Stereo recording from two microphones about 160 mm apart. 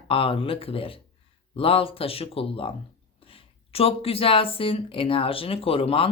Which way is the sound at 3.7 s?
35° left (ahead or behind).